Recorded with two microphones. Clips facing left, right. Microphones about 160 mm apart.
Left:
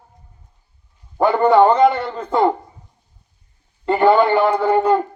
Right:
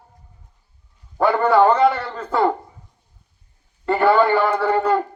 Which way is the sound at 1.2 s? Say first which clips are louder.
Left 2 dB; 20° left (ahead or behind).